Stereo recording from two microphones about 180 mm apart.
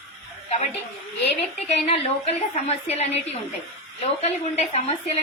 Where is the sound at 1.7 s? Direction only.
35° left (ahead or behind).